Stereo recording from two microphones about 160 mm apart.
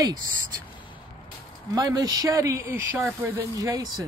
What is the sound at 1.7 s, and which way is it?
Speech, 20° right (ahead or behind).